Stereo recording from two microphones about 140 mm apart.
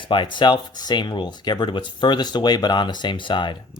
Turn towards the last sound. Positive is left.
turn(degrees=35)  # may be behind; listen again after turning